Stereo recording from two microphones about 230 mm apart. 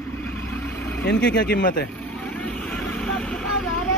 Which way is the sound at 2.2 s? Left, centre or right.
Centre.